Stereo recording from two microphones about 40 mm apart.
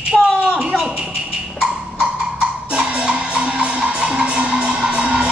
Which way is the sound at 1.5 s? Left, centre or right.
Right.